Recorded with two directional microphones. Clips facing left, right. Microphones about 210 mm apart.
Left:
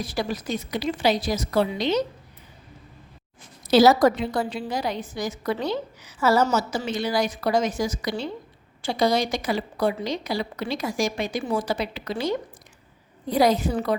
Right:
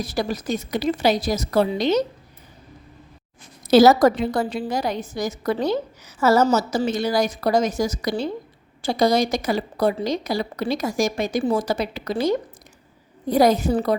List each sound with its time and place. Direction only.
0.0 s a woman's voice: 40° right (ahead or behind)
3.7 s a woman's voice: 45° right (ahead or behind)